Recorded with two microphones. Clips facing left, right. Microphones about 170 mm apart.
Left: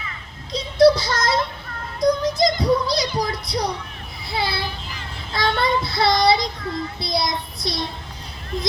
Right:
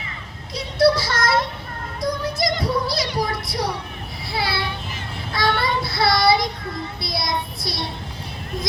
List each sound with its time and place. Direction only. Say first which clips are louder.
0.8 s child singing: left 3 dB; 20° left (ahead or behind)
2.0 s music: left 6 dB; 20° left (ahead or behind)
4.3 s a sound: even; 20° left (ahead or behind)
5.3 s child singing: left 1 dB; 20° left (ahead or behind)